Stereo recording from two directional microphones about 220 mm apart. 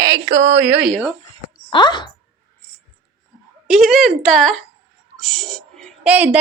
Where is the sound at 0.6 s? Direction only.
5° right (ahead or behind).